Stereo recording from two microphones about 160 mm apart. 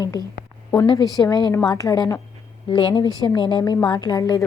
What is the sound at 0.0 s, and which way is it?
A woman's voice, 25° left (ahead or behind).